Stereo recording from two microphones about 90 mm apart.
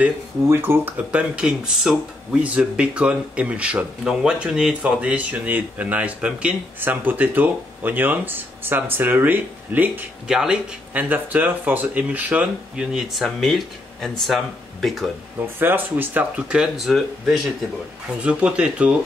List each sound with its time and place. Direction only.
0.5 s speech: 25° right (ahead or behind)
10.2 s speech: 5° right (ahead or behind)
10.9 s speech: 20° right (ahead or behind); by 15.0 s centre (ahead or behind)
15.6 s speech: 20° right (ahead or behind); by 17.4 s centre (ahead or behind)
18.2 s speech: 15° right (ahead or behind)